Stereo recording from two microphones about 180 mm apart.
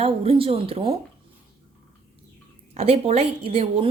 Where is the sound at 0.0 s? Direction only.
30° right (ahead or behind).